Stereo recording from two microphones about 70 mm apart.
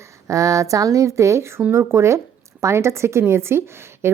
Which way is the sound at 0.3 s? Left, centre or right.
Right.